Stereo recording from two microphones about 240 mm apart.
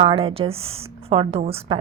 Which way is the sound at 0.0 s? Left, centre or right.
Right.